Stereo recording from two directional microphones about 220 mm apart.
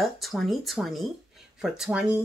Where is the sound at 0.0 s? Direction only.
Centre (ahead or behind).